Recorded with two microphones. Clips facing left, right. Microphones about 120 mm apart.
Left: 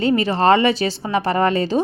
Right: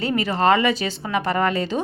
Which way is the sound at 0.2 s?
30° left (ahead or behind).